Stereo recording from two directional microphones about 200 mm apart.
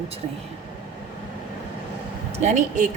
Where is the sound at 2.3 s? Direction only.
35° right (ahead or behind).